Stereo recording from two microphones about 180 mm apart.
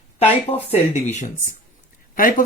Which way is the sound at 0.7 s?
40° left (ahead or behind).